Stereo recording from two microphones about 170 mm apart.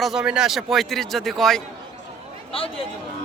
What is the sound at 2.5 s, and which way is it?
Speech, 35° left (ahead or behind).